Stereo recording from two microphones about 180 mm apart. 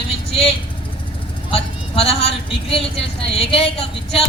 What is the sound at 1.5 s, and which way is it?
A woman's voice, 30° left (ahead or behind).